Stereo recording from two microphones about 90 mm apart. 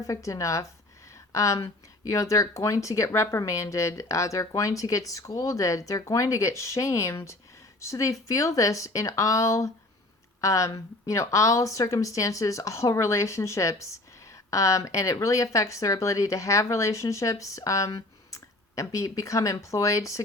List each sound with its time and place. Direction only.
0.0 s speech: 35° left (ahead or behind)